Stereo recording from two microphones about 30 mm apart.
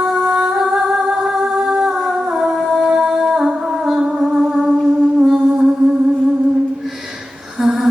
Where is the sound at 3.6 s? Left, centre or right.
Right.